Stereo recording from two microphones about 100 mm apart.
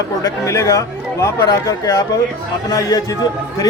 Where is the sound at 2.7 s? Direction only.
35° left (ahead or behind).